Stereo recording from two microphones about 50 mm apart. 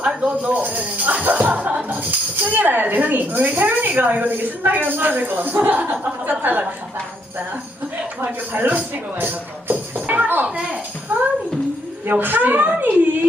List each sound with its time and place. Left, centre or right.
0.0 s a sound: centre
0.4 s speech: right
8.2 s music: right
11.1 s speech: right